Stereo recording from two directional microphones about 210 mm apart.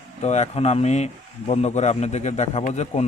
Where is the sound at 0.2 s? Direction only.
30° left (ahead or behind).